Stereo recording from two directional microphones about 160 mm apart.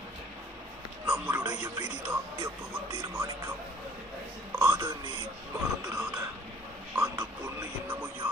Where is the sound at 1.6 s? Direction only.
20° right (ahead or behind).